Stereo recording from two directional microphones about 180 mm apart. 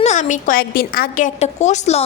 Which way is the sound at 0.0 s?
40° left (ahead or behind).